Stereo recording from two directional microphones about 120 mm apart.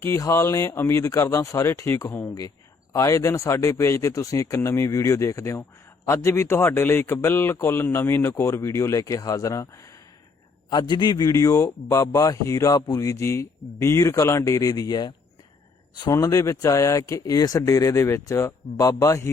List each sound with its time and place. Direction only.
0.0 s a man's voice: 25° left (ahead or behind)
10.7 s a man's voice: 40° left (ahead or behind)